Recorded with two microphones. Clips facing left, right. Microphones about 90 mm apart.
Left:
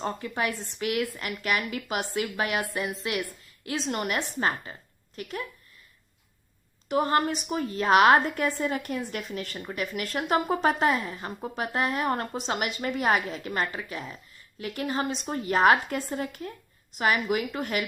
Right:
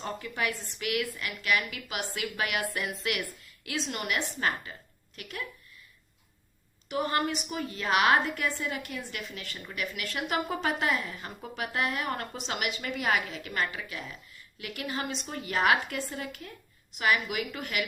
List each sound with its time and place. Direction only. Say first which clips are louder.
0.0 s a woman's voice: left 3 dB; 35° left (ahead or behind)
6.8 s a woman's voice: left 5 dB; 35° left (ahead or behind)